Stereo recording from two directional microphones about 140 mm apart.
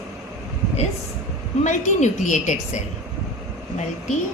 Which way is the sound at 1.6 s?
55° left (ahead or behind).